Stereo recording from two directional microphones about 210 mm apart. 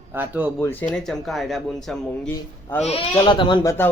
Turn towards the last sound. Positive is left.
turn(degrees=20)  # may be behind; listen again after turning